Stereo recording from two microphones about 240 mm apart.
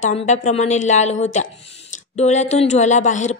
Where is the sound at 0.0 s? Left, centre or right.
Left.